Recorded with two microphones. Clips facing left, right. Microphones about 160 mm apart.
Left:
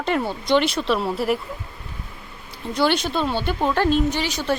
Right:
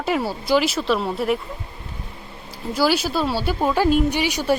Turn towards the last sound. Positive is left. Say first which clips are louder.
# right 3 dB
turn(degrees=-10)  # may be behind; listen again after turning